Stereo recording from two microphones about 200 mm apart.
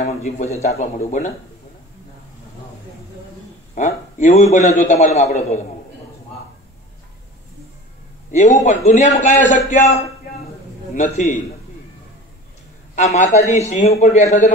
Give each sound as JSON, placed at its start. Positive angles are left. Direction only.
{"t": 0.0, "sound": "a man's voice", "side_deg": 35}
{"t": 3.7, "sound": "a man's voice", "side_deg": 40}
{"t": 8.3, "sound": "a man's voice", "side_deg": 35}
{"t": 12.9, "sound": "a man's voice", "side_deg": 35}